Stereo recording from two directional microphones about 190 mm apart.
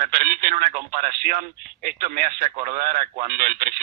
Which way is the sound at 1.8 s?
50° right (ahead or behind).